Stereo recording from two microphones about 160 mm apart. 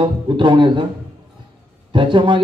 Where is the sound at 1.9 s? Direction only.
30° right (ahead or behind).